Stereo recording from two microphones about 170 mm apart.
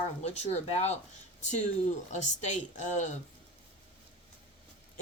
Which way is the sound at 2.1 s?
45° left (ahead or behind).